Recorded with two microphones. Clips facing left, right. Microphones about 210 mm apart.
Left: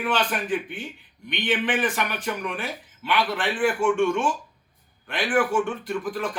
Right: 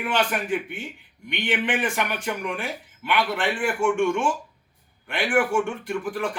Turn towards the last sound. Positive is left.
turn(degrees=-10)  # may be behind; listen again after turning